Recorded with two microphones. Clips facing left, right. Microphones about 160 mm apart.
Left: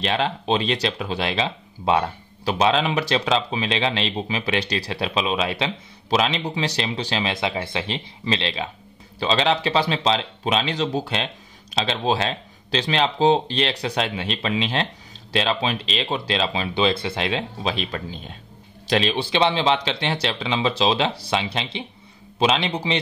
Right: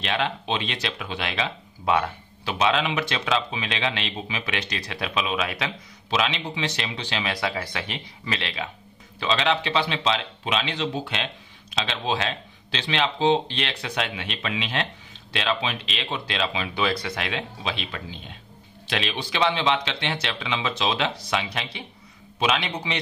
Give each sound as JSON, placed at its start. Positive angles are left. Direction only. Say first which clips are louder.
{"t": 0.0, "sound": "speech", "louder": "left 3 dB", "side_deg": 35}